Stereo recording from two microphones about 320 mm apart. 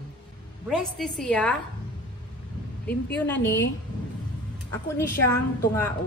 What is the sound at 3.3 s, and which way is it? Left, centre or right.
Speech, left.